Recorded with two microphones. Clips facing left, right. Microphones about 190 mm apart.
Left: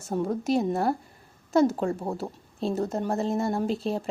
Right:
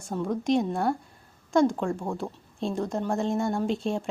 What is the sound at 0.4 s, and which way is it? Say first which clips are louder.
Speech: right 1 dB; 5° left (ahead or behind).